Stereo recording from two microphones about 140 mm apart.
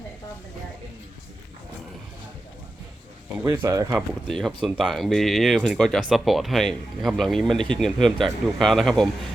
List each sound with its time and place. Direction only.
3.4 s speech: 20° right (ahead or behind)
4.3 s speech: 5° left (ahead or behind)